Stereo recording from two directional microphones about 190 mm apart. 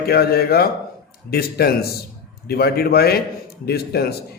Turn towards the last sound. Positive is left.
turn(degrees=55)  # may be behind; listen again after turning